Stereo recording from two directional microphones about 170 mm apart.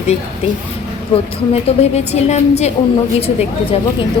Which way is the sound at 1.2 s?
35° left (ahead or behind).